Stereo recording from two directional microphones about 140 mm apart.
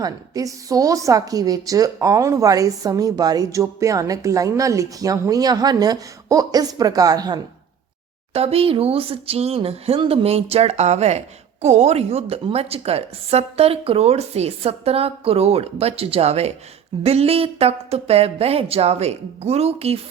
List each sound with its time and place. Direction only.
0.0 s a woman's voice: 25° right (ahead or behind)
8.3 s a woman's voice: 45° right (ahead or behind)